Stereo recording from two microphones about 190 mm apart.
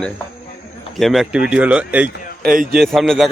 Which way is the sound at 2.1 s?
50° left (ahead or behind).